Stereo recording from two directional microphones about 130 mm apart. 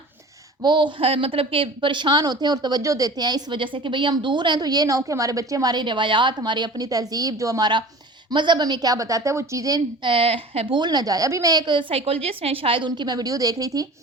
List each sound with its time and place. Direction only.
0.6 s a woman's voice: 35° right (ahead or behind)
10.8 s a woman's voice: 30° right (ahead or behind)